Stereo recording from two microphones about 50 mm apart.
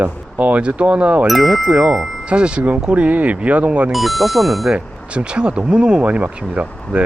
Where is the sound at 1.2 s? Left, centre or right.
Centre; by 3.9 s right.